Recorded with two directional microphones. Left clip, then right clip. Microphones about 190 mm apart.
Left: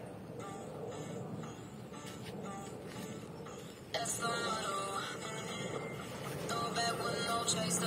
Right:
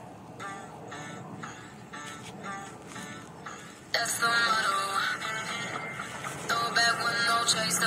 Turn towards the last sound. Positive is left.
turn(degrees=-20)  # may be behind; listen again after turning